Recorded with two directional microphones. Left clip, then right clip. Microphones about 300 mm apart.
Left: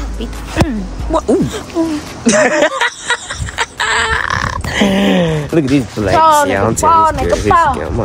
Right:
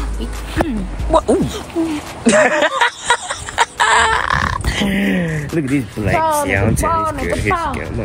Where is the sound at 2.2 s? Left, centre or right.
Centre.